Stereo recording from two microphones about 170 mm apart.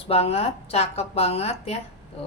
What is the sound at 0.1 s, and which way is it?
Speech, 35° left (ahead or behind).